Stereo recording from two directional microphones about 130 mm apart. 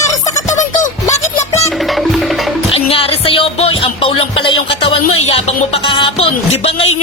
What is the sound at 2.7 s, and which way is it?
Music, 45° left (ahead or behind).